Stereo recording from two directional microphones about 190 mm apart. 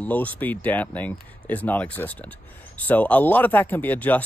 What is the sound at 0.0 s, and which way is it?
Speech, 10° left (ahead or behind).